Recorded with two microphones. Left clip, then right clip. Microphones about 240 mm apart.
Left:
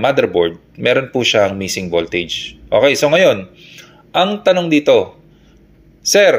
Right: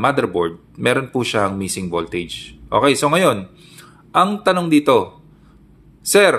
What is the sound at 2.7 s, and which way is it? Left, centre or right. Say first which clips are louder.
A man's voice: left 4 dB; centre.